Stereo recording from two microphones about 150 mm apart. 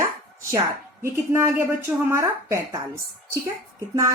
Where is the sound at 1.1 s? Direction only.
15° right (ahead or behind).